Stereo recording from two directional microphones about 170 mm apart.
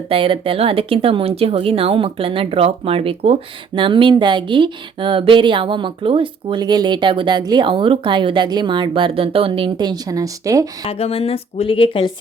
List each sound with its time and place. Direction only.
0.1 s speech: 30° right (ahead or behind)
10.8 s a woman's voice: 35° left (ahead or behind)